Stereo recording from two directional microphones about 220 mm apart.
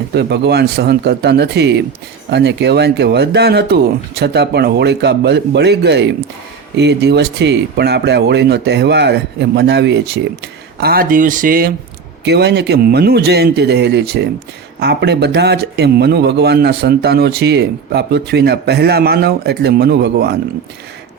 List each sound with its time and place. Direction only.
0.1 s speech: 50° right (ahead or behind)